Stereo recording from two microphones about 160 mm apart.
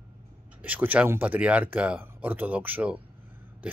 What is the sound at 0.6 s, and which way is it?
Speech, 10° right (ahead or behind).